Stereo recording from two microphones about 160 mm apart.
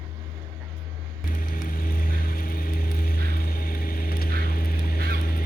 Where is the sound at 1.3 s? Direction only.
60° left (ahead or behind).